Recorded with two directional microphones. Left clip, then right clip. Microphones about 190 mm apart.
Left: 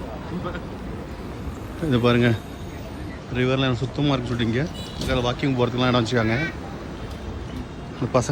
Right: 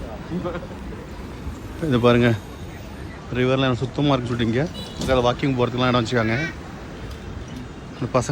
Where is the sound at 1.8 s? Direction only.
5° left (ahead or behind).